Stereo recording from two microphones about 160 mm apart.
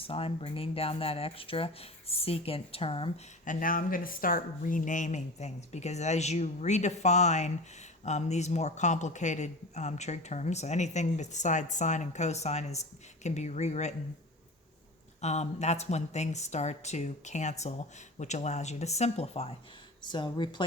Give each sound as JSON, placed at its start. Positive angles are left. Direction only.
{"t": 0.1, "sound": "speech", "side_deg": 35}
{"t": 3.4, "sound": "speech", "side_deg": 55}
{"t": 15.2, "sound": "speech", "side_deg": 45}
{"t": 20.0, "sound": "speech", "side_deg": 30}